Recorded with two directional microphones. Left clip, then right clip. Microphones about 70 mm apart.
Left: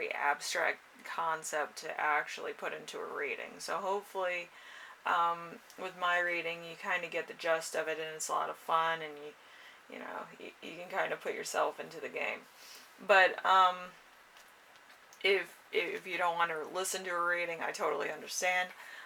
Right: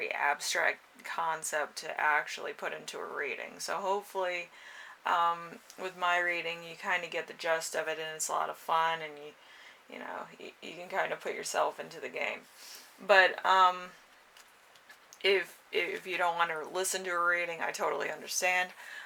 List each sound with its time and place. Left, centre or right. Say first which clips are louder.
0.0 s speech: right 2 dB; right
9.9 s speech: right 2 dB; right
10.6 s speech: right 2 dB; right
15.2 s speech: right 2 dB; right